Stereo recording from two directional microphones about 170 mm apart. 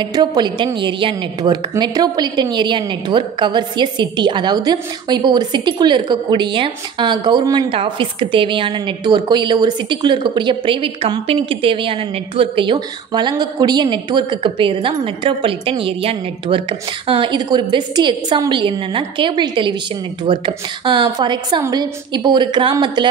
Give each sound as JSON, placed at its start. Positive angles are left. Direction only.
{"t": 0.0, "sound": "a woman's voice", "side_deg": -25}